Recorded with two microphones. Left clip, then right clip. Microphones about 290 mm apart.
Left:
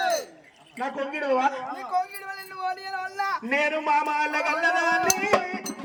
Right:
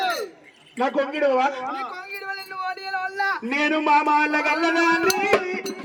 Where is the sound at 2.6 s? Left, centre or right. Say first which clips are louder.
Right 2 dB; centre.